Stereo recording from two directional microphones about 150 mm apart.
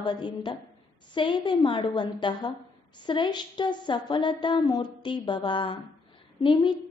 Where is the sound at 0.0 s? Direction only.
30° left (ahead or behind).